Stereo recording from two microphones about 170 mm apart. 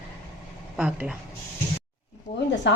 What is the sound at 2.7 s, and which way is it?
Speech, 90° left.